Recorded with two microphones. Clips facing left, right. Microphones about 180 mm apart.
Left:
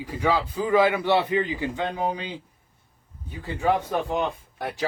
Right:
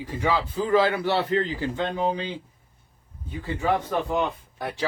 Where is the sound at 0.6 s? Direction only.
15° left (ahead or behind).